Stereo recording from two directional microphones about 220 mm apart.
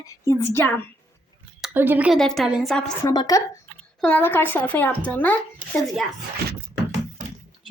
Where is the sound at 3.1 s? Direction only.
20° left (ahead or behind).